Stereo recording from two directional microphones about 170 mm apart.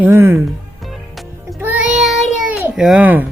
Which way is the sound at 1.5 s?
10° right (ahead or behind).